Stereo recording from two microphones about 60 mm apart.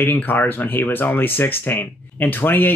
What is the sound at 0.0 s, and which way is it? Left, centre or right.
Speech, left.